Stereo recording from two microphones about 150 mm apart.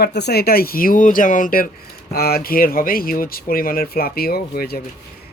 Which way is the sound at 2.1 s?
90° left.